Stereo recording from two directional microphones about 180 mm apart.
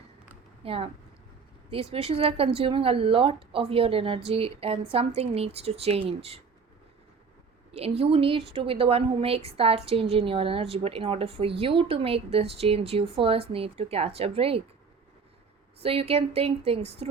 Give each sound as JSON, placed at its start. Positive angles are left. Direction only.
{"t": 0.6, "sound": "a woman's voice", "side_deg": -30}
{"t": 7.7, "sound": "a woman's voice", "side_deg": -35}
{"t": 15.8, "sound": "a woman's voice", "side_deg": -35}